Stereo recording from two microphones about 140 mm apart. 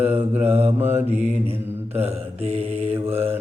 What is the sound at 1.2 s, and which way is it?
Mantra, 50° right (ahead or behind).